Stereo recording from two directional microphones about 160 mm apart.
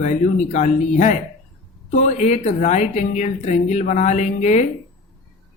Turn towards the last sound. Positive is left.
turn(degrees=45)  # may be behind; listen again after turning